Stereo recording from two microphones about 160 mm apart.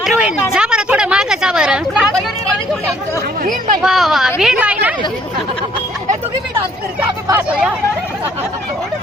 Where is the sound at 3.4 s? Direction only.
55° right (ahead or behind).